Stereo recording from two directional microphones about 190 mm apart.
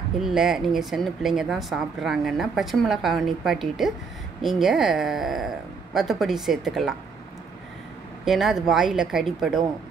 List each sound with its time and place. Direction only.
0.2 s speech: centre (ahead or behind)
8.3 s speech: centre (ahead or behind)